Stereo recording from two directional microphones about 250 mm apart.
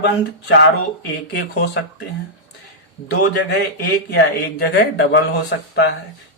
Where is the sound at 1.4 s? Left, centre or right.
Left.